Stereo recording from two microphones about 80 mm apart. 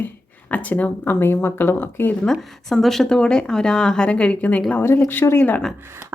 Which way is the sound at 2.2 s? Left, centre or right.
Centre.